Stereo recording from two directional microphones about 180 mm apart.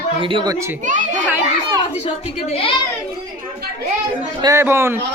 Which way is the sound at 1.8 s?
25° left (ahead or behind).